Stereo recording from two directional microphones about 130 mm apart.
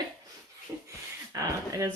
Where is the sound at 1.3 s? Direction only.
25° right (ahead or behind).